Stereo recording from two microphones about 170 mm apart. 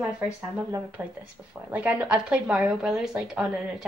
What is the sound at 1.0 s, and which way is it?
A woman's voice, 10° right (ahead or behind).